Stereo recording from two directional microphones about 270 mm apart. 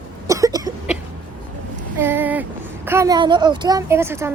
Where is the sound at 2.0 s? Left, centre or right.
Centre.